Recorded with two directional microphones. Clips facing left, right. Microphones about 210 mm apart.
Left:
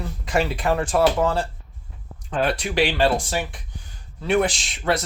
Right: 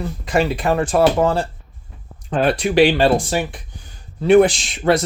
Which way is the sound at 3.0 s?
15° right (ahead or behind).